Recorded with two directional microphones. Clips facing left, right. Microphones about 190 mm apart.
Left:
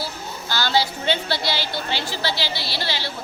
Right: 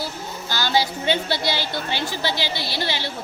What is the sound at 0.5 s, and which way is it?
A woman's voice, 15° right (ahead or behind).